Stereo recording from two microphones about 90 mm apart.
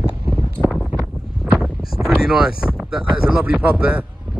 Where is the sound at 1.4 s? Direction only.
5° right (ahead or behind).